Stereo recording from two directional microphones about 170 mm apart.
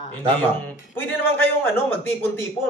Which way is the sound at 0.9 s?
10° left (ahead or behind).